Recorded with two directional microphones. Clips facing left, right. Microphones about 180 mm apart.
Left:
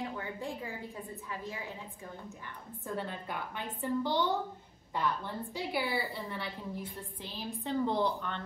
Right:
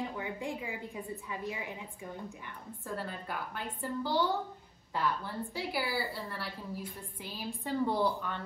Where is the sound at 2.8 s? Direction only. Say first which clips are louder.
Left 1 dB; centre (ahead or behind).